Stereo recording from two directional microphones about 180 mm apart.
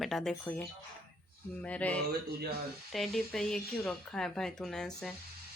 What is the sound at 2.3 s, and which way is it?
Speech, 60° right (ahead or behind).